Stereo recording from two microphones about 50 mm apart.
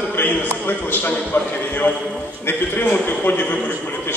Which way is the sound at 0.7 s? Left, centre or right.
Left.